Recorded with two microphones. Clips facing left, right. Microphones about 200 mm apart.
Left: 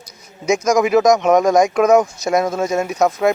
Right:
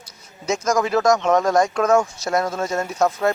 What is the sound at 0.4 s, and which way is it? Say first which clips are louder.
Speech: left 5 dB; 15° left (ahead or behind).